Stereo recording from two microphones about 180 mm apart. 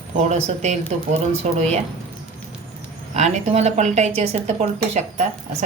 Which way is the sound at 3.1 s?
40° right (ahead or behind).